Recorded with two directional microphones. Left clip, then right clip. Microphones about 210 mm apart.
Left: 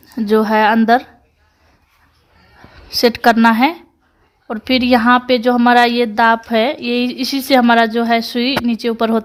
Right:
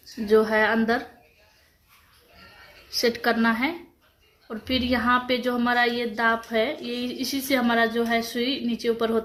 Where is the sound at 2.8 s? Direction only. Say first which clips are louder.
Left 11 dB; 45° left (ahead or behind).